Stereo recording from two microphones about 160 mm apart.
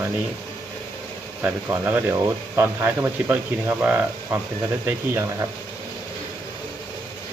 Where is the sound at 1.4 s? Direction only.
15° right (ahead or behind).